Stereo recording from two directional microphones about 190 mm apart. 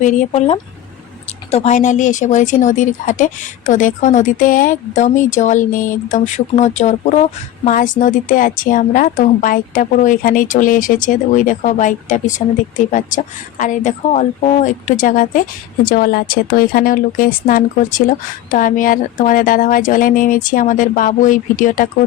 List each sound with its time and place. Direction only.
0.0 s speech: 40° left (ahead or behind)
0.3 s speech: 30° left (ahead or behind)